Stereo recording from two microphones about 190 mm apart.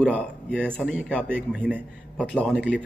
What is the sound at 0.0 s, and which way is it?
A man's voice, 10° left (ahead or behind).